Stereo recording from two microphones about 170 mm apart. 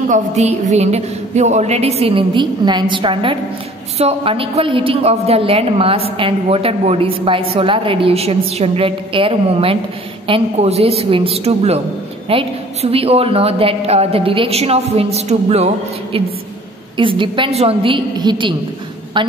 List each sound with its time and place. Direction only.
0.1 s a woman's voice: 45° right (ahead or behind)